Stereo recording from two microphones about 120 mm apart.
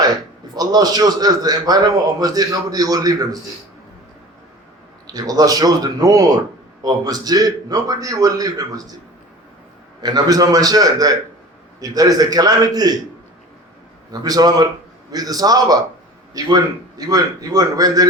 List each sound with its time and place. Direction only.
0.5 s a man's voice: 35° right (ahead or behind)
5.0 s a man's voice: 30° right (ahead or behind)
10.0 s a man's voice: 35° right (ahead or behind)
14.1 s a man's voice: 30° right (ahead or behind)